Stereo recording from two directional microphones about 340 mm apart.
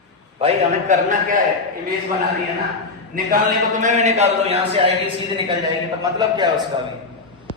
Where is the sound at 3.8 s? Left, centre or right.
Right.